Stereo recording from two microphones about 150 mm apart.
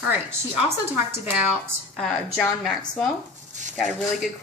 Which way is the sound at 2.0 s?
5° left (ahead or behind).